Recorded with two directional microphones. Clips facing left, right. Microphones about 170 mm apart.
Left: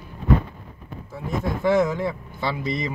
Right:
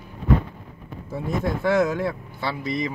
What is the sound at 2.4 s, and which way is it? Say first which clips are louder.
Speech: even; 25° left (ahead or behind).